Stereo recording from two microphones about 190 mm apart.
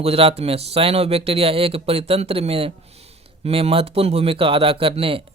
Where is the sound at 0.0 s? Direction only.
30° right (ahead or behind).